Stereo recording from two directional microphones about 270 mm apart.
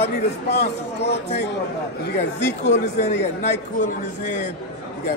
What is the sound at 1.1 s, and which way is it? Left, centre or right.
Speech, left.